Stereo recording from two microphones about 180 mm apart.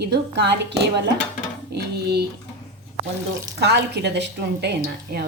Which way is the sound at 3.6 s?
70° right (ahead or behind).